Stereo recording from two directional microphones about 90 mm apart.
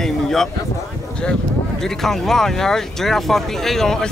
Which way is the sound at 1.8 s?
5° left (ahead or behind).